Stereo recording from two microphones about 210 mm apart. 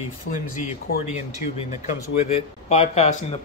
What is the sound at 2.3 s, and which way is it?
Speech, 30° left (ahead or behind).